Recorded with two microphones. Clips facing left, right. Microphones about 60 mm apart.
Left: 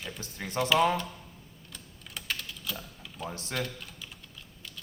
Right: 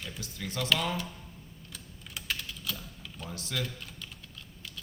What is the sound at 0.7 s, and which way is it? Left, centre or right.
Speech, left.